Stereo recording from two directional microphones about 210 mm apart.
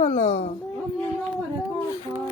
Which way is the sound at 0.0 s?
30° left (ahead or behind).